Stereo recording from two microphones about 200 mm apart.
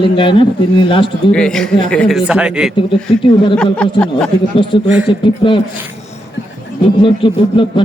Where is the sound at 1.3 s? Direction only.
5° left (ahead or behind).